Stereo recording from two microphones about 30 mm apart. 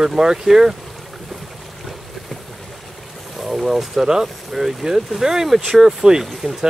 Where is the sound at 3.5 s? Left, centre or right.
Centre.